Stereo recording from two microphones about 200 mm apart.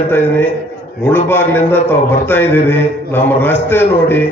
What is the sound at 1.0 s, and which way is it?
A man's voice, 10° left (ahead or behind).